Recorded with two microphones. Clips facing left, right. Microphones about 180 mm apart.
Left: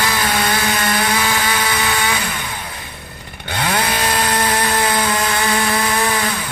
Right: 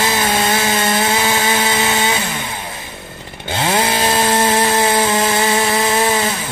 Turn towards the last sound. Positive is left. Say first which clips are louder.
# right 3 dB
turn(degrees=-25)  # may be behind; listen again after turning